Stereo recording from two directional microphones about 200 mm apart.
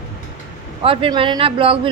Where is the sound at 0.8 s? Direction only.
25° right (ahead or behind).